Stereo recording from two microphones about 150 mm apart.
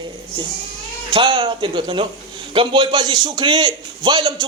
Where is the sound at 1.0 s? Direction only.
35° right (ahead or behind).